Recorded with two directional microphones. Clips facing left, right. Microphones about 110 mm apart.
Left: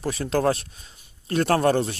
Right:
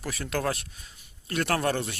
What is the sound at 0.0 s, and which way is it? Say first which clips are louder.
Speech: left 7 dB; 30° left (ahead or behind).